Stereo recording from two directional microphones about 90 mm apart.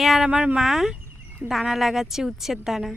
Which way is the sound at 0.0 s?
Centre (ahead or behind).